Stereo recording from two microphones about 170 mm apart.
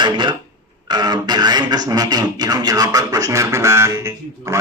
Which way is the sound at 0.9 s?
25° right (ahead or behind).